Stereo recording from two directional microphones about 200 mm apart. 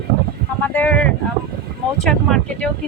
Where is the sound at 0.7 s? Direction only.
5° left (ahead or behind).